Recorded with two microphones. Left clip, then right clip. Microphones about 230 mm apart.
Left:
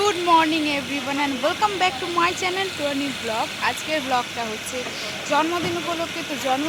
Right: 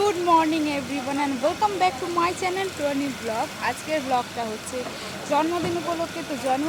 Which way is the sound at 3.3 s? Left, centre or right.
Centre.